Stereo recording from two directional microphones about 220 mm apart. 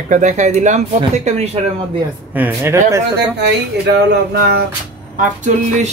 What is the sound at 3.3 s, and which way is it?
Speech, 50° right (ahead or behind).